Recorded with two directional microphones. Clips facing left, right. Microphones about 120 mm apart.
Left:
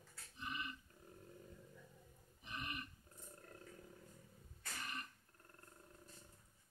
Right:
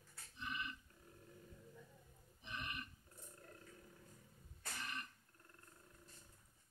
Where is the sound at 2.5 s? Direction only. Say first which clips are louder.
Left 1 dB; 35° left (ahead or behind).